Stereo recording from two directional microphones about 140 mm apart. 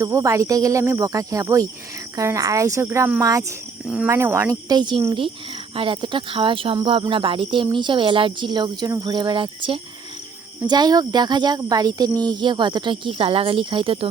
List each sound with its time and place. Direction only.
0.0 s speech: 20° right (ahead or behind)
3.8 s speech: 5° right (ahead or behind)
4.1 s speech: 20° right (ahead or behind)
4.8 s speech: 35° right (ahead or behind)